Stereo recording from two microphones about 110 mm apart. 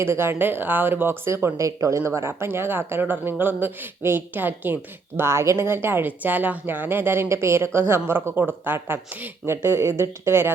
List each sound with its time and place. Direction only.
0.0 s speech: 25° right (ahead or behind)